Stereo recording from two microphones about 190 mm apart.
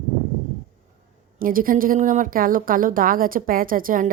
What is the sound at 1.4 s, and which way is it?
A woman's voice, 45° right (ahead or behind).